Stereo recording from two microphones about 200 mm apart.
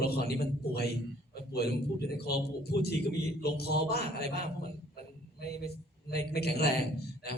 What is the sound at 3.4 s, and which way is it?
Speech, 55° left (ahead or behind).